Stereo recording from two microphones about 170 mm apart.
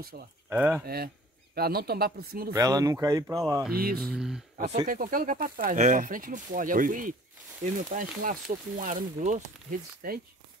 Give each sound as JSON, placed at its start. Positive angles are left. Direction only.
{"t": 0.1, "sound": "speech", "side_deg": -55}
{"t": 0.5, "sound": "speech", "side_deg": -10}
{"t": 0.8, "sound": "speech", "side_deg": -65}
{"t": 2.5, "sound": "speech", "side_deg": -20}
{"t": 3.7, "sound": "speech", "side_deg": -60}
{"t": 4.0, "sound": "speech", "side_deg": -5}
{"t": 4.8, "sound": "speech", "side_deg": -55}